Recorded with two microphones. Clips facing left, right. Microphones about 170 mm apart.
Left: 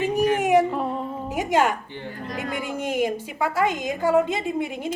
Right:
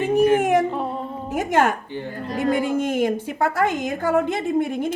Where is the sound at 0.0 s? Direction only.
55° right (ahead or behind).